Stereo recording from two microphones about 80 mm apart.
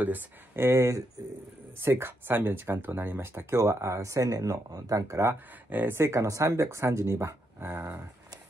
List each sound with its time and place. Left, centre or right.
0.0 s speech: right
5.7 s speech: right